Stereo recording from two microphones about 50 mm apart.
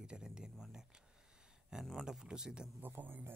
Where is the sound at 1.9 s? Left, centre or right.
Centre.